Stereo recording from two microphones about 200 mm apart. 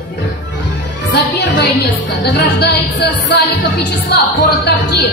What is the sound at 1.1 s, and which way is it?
Music, 55° left (ahead or behind).